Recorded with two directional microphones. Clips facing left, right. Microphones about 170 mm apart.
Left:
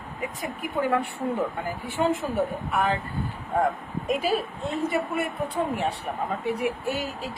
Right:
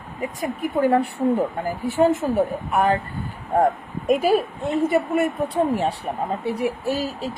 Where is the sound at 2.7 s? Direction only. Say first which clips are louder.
Right 6 dB; 50° right (ahead or behind).